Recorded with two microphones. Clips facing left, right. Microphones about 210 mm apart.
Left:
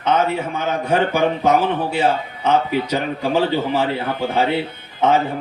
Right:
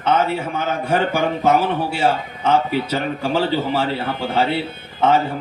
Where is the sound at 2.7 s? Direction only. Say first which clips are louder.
Left 1 dB; 10° left (ahead or behind).